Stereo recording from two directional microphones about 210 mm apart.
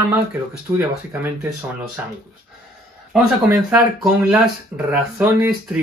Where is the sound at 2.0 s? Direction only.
10° right (ahead or behind).